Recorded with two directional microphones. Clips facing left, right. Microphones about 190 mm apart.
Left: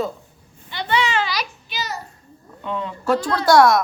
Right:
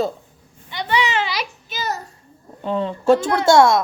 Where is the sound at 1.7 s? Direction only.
45° right (ahead or behind).